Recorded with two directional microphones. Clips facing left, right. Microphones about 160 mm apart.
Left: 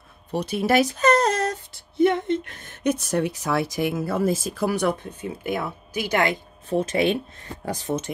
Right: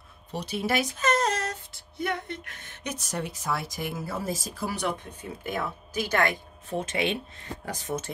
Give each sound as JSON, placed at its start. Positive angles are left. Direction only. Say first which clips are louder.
{"t": 0.3, "sound": "speech", "louder": "left 7 dB", "side_deg": 55}
{"t": 0.9, "sound": "a sound", "louder": "left 6 dB", "side_deg": 35}
{"t": 2.0, "sound": "speech", "louder": "left 12 dB", "side_deg": 25}
{"t": 2.6, "sound": "speech", "louder": "left 13 dB", "side_deg": 50}
{"t": 5.4, "sound": "speech", "louder": "left 3 dB", "side_deg": 10}
{"t": 6.7, "sound": "speech", "louder": "left 7 dB", "side_deg": 35}